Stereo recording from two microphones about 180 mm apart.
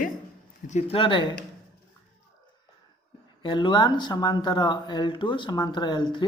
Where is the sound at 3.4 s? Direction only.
25° left (ahead or behind).